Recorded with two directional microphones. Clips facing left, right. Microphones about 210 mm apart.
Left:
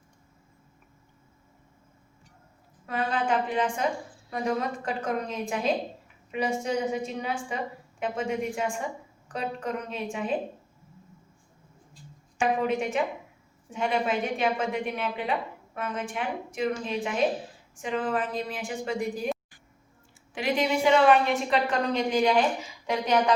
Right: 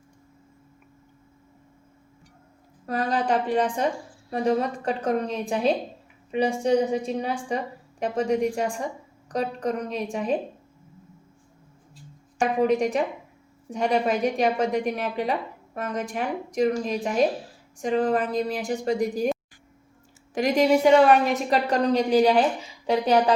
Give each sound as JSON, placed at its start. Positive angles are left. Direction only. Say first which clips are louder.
{"t": 2.8, "sound": "a woman's voice", "louder": "right 3 dB", "side_deg": -40}
{"t": 12.4, "sound": "a woman's voice", "louder": "right 4 dB", "side_deg": -40}
{"t": 20.3, "sound": "a woman's voice", "louder": "right 6 dB", "side_deg": -40}